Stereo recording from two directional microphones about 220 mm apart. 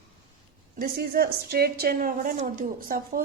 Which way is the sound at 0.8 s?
45° right (ahead or behind).